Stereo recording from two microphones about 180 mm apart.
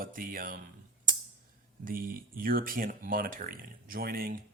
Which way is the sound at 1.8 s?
50° right (ahead or behind).